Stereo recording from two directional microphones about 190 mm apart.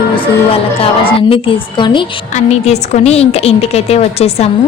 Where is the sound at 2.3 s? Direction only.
35° left (ahead or behind).